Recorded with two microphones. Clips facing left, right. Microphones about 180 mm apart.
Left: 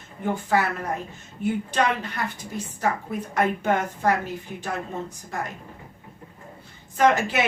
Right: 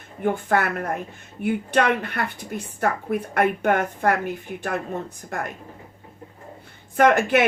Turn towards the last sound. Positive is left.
turn(degrees=-55)  # may be behind; listen again after turning